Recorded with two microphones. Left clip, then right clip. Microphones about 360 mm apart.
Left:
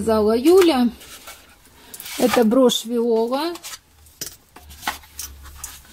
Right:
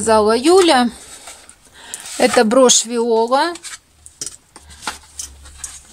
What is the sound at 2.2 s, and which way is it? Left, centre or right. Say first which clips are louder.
Speech: right 5 dB; right.